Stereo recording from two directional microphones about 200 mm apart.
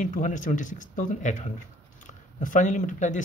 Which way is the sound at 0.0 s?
40° left (ahead or behind).